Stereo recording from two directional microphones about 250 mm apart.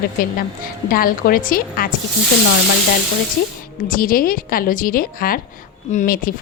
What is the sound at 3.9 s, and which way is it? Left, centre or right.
A woman's voice, left.